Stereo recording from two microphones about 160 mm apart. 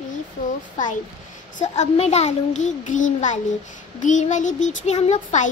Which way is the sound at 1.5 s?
45° left (ahead or behind).